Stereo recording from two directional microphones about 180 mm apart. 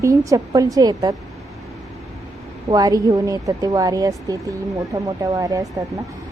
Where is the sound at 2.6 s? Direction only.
20° right (ahead or behind).